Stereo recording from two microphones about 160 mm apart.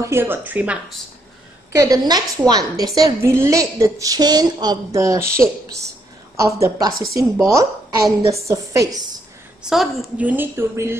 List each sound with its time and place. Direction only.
0.0 s a woman's voice: 15° right (ahead or behind)
1.7 s a woman's voice: 20° right (ahead or behind)
6.3 s a woman's voice: 20° right (ahead or behind)
9.6 s a woman's voice: centre (ahead or behind)